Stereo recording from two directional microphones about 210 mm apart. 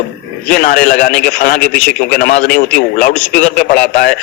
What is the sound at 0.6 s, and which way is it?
Speech, 45° left (ahead or behind).